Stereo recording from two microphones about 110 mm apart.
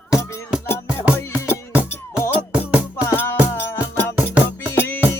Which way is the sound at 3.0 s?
20° left (ahead or behind).